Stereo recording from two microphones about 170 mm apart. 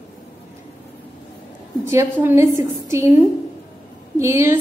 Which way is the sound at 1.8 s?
15° right (ahead or behind).